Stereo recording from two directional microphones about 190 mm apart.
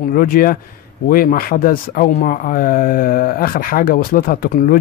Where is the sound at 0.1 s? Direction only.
50° left (ahead or behind).